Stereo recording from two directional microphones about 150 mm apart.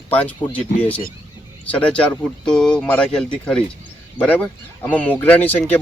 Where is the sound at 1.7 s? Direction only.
5° left (ahead or behind).